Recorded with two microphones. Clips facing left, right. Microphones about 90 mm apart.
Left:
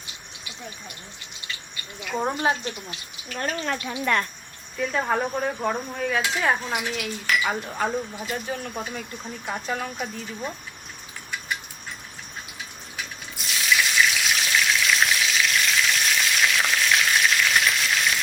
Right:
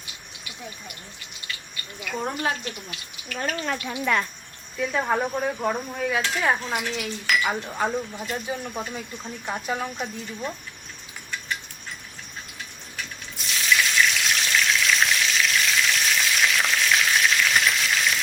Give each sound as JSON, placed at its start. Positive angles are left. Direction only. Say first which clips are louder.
{"t": 1.7, "sound": "speech", "louder": "left 3 dB", "side_deg": 20}
{"t": 3.8, "sound": "cutlery", "louder": "even", "side_deg": 0}
{"t": 8.4, "sound": "speech", "louder": "even", "side_deg": -10}
{"t": 9.2, "sound": "cutlery", "louder": "right 1 dB", "side_deg": -5}
{"t": 10.0, "sound": "cutlery", "louder": "even", "side_deg": 5}
{"t": 13.0, "sound": "water", "louder": "even", "side_deg": 0}